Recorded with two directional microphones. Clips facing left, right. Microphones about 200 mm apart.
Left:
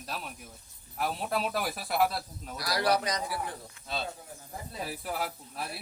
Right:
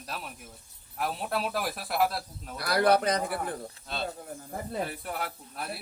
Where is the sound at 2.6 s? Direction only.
55° right (ahead or behind).